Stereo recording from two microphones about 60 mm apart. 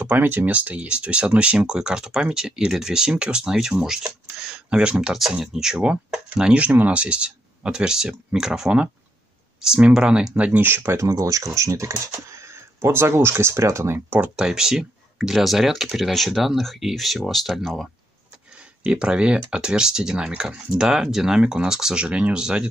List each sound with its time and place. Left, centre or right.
0.0 s speech: right
10.6 s speech: right
11.0 s speech: right
14.3 s speech: centre
18.9 s speech: centre